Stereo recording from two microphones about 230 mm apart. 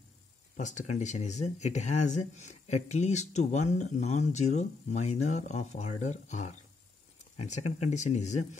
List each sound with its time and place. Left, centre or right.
0.6 s speech: left